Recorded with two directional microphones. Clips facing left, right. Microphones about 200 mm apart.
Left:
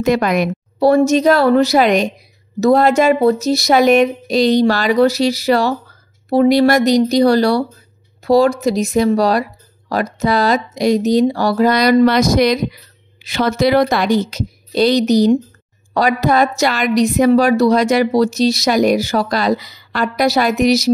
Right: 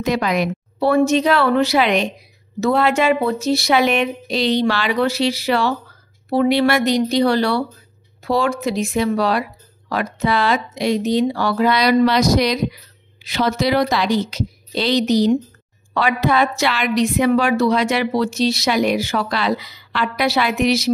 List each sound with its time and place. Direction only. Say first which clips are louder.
0.0 s a woman's voice: left 4 dB; 50° left (ahead or behind)